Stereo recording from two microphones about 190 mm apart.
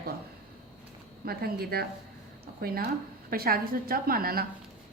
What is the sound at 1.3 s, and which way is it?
Speech, 55° right (ahead or behind).